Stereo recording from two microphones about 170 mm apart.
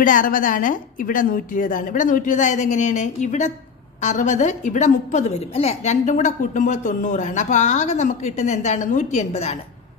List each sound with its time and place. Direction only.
0.0 s a woman's voice: 50° left (ahead or behind)